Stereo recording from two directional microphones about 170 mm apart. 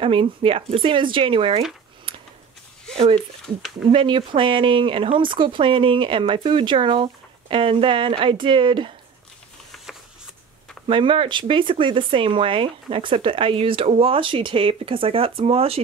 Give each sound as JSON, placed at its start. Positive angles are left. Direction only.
{"t": 0.0, "sound": "speech", "side_deg": -30}
{"t": 3.9, "sound": "speech", "side_deg": -30}
{"t": 10.9, "sound": "speech", "side_deg": -30}